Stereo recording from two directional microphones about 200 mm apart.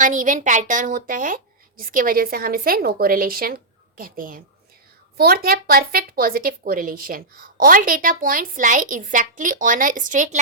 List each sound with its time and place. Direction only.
0.0 s a woman's voice: 40° right (ahead or behind)